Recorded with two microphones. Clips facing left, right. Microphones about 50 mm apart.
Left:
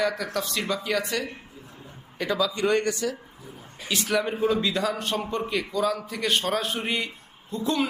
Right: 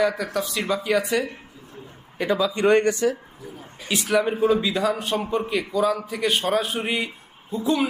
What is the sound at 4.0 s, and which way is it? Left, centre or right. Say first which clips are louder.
A man's voice: right 4 dB; centre.